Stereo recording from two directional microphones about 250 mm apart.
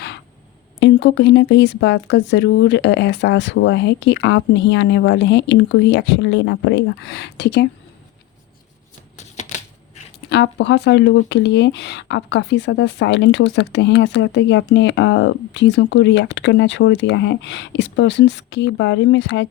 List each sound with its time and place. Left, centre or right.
0.8 s speech: left
9.1 s shuffling cards: left
10.2 s speech: left